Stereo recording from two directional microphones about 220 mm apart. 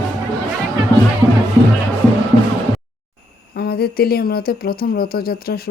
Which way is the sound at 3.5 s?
45° left (ahead or behind).